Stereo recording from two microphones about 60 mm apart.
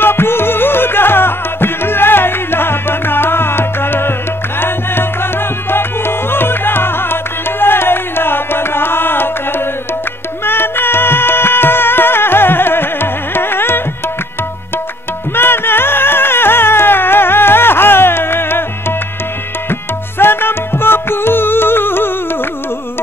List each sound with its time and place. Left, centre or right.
0.0 s music: left
15.3 s music: left
19.7 s tabla: left